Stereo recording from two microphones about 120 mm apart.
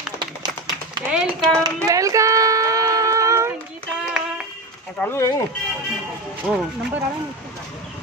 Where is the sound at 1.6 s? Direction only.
30° right (ahead or behind).